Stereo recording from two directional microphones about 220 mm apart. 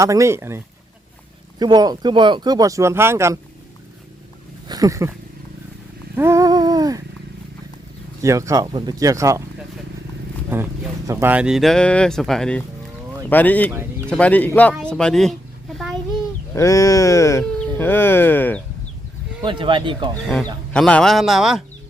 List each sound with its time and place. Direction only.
0.0 s speech: 15° right (ahead or behind)
4.7 s speech: 15° right (ahead or behind)
6.1 s a sound: 10° right (ahead or behind)
8.2 s speech: 15° right (ahead or behind)
10.5 s speech: 10° right (ahead or behind)
16.6 s speech: 15° left (ahead or behind)
19.4 s speech: 20° right (ahead or behind)
20.1 s speech: 5° left (ahead or behind)